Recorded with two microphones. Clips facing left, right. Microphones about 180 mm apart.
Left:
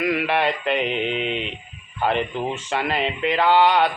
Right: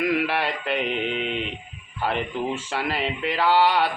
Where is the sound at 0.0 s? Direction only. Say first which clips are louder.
Left 2 dB; 5° right (ahead or behind).